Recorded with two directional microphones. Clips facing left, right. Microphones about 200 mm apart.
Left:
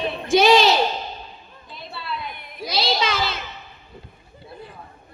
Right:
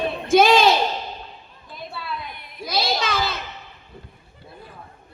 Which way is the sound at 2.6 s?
55° right (ahead or behind).